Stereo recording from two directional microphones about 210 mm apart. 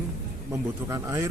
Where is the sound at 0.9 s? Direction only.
15° right (ahead or behind).